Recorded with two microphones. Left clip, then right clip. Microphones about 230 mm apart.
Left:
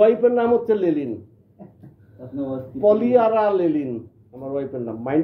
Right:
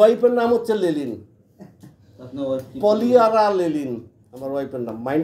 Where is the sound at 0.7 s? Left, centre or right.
Centre.